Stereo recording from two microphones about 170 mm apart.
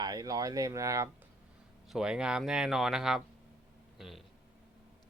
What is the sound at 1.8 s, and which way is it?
Speech, 5° right (ahead or behind).